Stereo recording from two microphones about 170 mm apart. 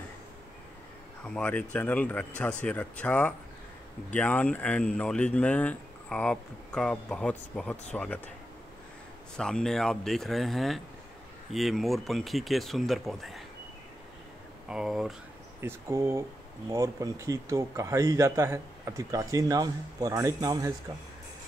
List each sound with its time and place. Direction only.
1.2 s speech: 5° left (ahead or behind)
9.4 s speech: 5° left (ahead or behind)
14.7 s speech: centre (ahead or behind)
15.6 s speech: 15° right (ahead or behind)